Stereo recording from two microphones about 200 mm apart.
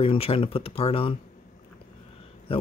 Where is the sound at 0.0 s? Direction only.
30° left (ahead or behind).